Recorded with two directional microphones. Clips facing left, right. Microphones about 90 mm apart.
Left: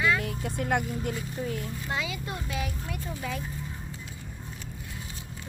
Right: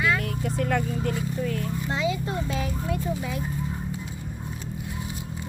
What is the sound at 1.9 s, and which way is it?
Speech, 25° right (ahead or behind).